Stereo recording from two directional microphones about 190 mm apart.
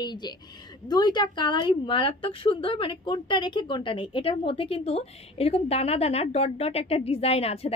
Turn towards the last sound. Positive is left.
turn(degrees=30)  # may be behind; listen again after turning